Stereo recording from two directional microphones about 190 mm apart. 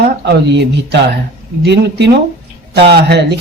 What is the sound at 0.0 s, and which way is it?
Speech, 60° right (ahead or behind).